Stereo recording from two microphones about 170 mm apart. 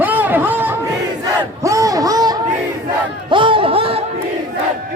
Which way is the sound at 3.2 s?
30° right (ahead or behind).